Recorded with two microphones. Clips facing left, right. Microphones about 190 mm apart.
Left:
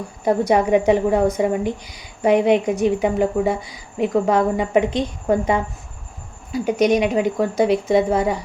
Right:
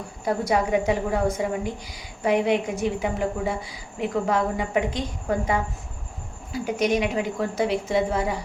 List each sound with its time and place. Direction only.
0.3 s a woman's voice: 20° left (ahead or behind)